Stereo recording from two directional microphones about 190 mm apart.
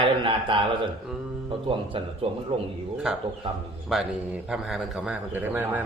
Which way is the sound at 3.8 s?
5° right (ahead or behind).